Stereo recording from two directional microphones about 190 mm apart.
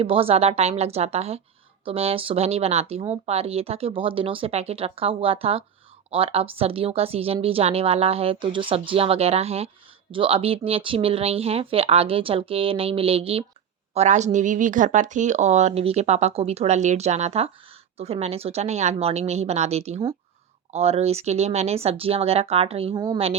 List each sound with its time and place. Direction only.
0.0 s speech: 30° right (ahead or behind)